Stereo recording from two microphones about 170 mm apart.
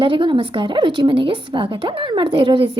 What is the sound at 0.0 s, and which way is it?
A woman's voice, 30° right (ahead or behind).